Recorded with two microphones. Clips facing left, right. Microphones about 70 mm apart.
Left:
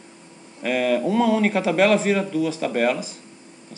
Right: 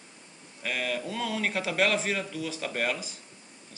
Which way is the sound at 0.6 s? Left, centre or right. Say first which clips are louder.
Left 11 dB; centre.